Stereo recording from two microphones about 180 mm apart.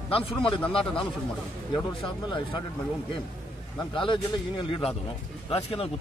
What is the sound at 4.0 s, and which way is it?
A man's voice, 30° left (ahead or behind).